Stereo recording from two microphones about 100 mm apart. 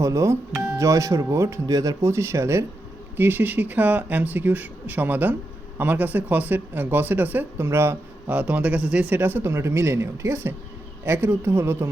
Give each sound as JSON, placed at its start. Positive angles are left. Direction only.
{"t": 0.0, "sound": "speech", "side_deg": -30}